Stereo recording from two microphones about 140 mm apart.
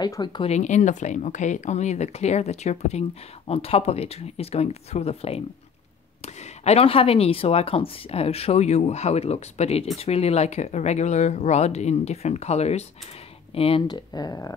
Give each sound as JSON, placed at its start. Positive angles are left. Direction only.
{"t": 0.0, "sound": "speech", "side_deg": 30}
{"t": 0.5, "sound": "speech", "side_deg": 60}
{"t": 13.6, "sound": "speech", "side_deg": 40}